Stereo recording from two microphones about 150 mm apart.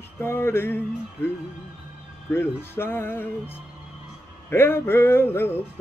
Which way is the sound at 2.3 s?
15° left (ahead or behind).